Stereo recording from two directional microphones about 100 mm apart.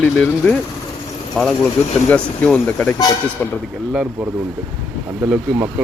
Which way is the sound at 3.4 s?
25° left (ahead or behind).